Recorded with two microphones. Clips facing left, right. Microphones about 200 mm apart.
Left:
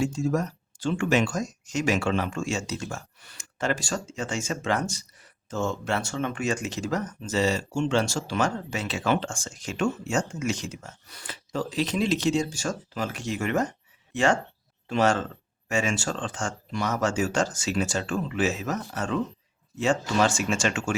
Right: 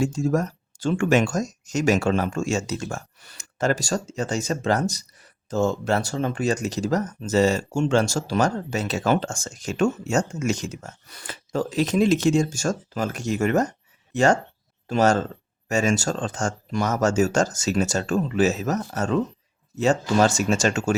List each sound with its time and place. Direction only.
0.0 s speech: 45° right (ahead or behind)